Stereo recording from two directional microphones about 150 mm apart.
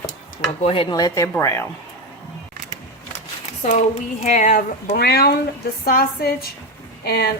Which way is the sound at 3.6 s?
50° left (ahead or behind).